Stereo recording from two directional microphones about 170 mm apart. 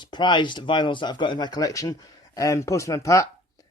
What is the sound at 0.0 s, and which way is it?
Speech, 25° left (ahead or behind).